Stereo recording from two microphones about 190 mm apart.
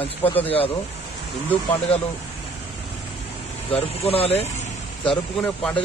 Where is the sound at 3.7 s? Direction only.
30° left (ahead or behind).